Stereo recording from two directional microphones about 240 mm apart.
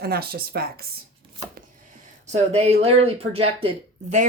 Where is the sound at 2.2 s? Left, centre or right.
Right.